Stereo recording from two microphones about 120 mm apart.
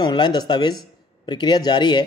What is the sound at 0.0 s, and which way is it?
A man's voice, 35° left (ahead or behind).